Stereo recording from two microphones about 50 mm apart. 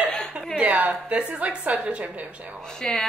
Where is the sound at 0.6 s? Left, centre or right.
Right.